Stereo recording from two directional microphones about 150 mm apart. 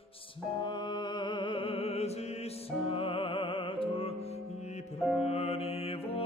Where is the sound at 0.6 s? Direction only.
30° left (ahead or behind).